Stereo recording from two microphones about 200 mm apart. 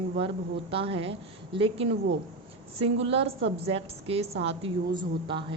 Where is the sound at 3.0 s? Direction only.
30° right (ahead or behind).